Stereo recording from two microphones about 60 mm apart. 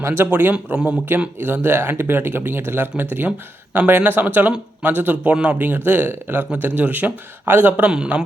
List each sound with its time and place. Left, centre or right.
0.3 s a man's voice: right
5.6 s speech: right
6.1 s speech: right
6.6 s a man's voice: right
7.9 s a man's voice: centre